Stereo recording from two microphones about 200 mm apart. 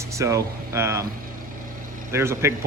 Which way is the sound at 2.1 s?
15° right (ahead or behind).